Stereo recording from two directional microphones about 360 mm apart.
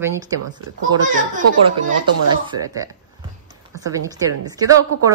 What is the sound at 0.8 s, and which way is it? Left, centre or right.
A child's voice, right.